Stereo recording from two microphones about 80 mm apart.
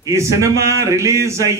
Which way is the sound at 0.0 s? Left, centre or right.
Right.